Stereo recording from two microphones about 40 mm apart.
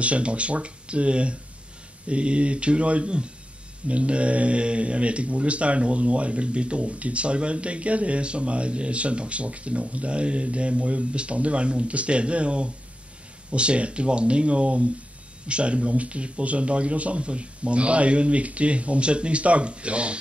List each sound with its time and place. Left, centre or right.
0.0 s speech: right